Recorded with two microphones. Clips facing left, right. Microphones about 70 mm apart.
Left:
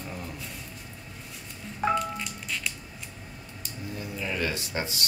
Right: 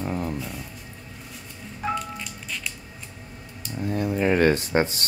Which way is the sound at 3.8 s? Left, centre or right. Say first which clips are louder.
Right 12 dB; right.